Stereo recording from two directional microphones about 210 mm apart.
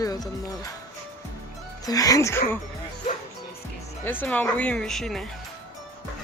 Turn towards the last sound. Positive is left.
turn(degrees=0)  # may be behind; listen again after turning